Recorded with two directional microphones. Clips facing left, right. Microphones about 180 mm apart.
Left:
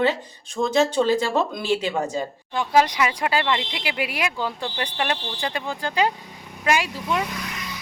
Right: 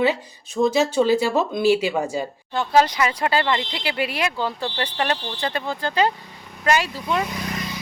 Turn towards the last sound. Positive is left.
turn(degrees=-35)  # may be behind; listen again after turning